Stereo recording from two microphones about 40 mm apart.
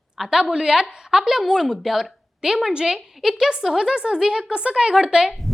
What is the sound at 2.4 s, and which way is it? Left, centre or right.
A woman's voice, centre.